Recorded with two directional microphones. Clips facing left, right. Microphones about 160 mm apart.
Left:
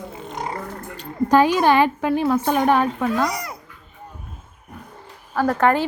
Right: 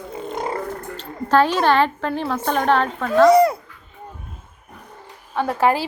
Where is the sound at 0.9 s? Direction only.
15° left (ahead or behind).